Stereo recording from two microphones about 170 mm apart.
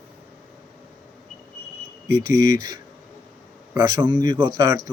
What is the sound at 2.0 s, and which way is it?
Speech, 25° right (ahead or behind).